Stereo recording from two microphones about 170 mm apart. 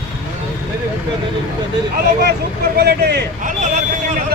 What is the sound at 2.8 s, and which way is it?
Speech, 75° right (ahead or behind).